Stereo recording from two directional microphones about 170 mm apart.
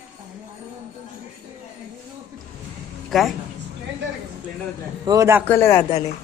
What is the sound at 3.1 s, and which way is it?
Speech, centre (ahead or behind).